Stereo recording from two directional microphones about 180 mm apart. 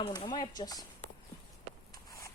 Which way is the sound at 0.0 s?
25° left (ahead or behind).